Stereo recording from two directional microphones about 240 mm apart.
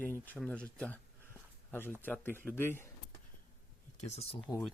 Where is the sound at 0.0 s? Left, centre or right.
Centre.